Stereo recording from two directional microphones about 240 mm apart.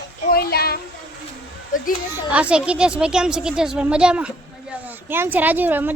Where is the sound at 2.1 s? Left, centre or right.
Centre.